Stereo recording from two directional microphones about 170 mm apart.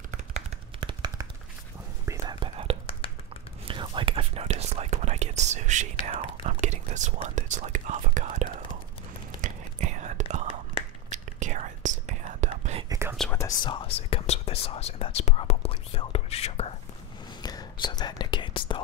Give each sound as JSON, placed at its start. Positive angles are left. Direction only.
{"t": 0.7, "sound": "a sound", "side_deg": -25}
{"t": 2.0, "sound": "whispering", "side_deg": -25}
{"t": 3.6, "sound": "speech", "side_deg": -30}
{"t": 9.4, "sound": "whispering", "side_deg": -45}
{"t": 13.2, "sound": "whispering", "side_deg": 5}
{"t": 13.7, "sound": "whispering", "side_deg": 30}
{"t": 17.4, "sound": "whispering", "side_deg": 25}